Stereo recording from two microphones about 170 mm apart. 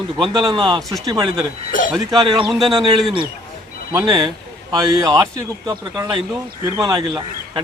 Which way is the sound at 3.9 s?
20° right (ahead or behind).